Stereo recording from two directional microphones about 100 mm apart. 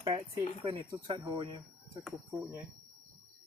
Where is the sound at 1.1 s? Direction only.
55° right (ahead or behind).